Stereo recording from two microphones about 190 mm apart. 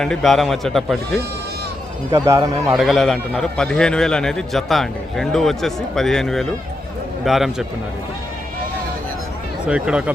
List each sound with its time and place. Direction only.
0.0 s a man's voice: centre (ahead or behind)
2.0 s speech: 15° right (ahead or behind)
2.7 s a man's voice: centre (ahead or behind)
9.6 s a man's voice: 5° right (ahead or behind)